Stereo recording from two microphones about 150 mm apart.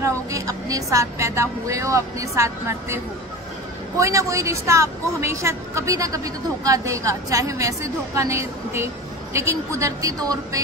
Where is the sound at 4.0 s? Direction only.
20° right (ahead or behind).